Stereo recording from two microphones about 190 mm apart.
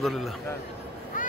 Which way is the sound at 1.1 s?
45° left (ahead or behind).